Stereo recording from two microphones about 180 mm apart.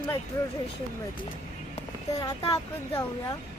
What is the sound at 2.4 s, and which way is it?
Speech, 20° left (ahead or behind).